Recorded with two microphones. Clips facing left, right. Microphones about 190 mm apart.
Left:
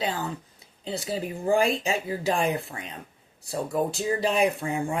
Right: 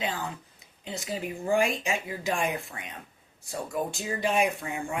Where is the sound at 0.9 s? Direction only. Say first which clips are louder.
Left 3 dB; 35° left (ahead or behind).